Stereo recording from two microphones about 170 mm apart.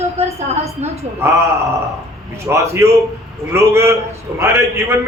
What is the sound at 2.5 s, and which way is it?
A man's voice, 15° right (ahead or behind).